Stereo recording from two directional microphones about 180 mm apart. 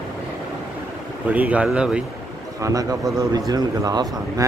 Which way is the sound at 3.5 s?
20° right (ahead or behind).